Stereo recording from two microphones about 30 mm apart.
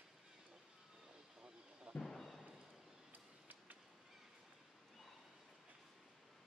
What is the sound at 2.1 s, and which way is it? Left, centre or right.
Music, centre.